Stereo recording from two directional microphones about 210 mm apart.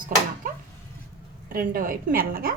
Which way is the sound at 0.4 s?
40° right (ahead or behind).